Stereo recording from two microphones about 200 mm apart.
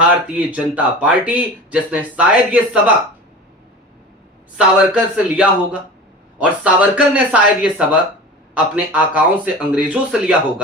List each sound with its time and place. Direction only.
0.3 s speech: 5° right (ahead or behind)
4.5 s a man's voice: 5° right (ahead or behind)